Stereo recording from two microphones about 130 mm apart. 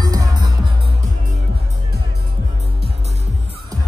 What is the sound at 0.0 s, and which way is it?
Music, 30° right (ahead or behind).